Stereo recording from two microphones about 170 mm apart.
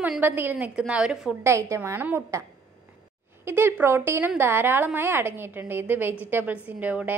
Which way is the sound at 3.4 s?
15° right (ahead or behind).